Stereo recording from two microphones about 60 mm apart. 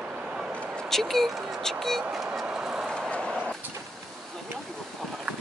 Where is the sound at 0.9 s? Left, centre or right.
Centre.